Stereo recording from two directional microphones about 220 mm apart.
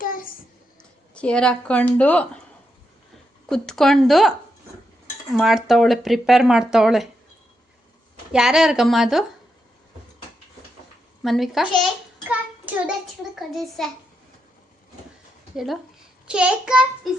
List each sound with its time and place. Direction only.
0.0 s a sound: 40° left (ahead or behind)
0.8 s speech: 5° left (ahead or behind)
3.5 s speech: centre (ahead or behind)
8.3 s speech: centre (ahead or behind)
11.2 s speech: centre (ahead or behind)
12.3 s child singing: 5° right (ahead or behind)
13.5 s speech: centre (ahead or behind)
15.5 s speech: centre (ahead or behind)